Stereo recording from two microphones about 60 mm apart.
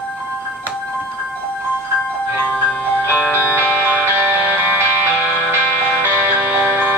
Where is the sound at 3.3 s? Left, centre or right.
Right.